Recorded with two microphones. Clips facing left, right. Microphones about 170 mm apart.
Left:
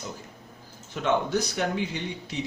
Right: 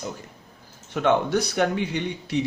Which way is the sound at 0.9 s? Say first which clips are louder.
Right 4 dB; 65° right (ahead or behind).